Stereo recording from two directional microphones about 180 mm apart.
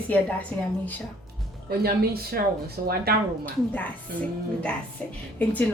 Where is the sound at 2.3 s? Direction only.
60° right (ahead or behind).